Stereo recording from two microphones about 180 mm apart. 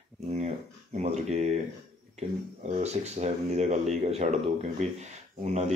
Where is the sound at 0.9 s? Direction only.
40° right (ahead or behind).